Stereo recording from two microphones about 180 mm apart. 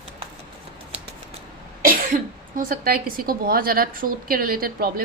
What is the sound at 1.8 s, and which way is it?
Speech, 50° right (ahead or behind).